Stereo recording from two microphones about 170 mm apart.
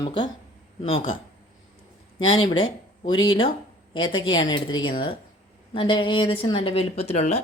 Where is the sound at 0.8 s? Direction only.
35° left (ahead or behind).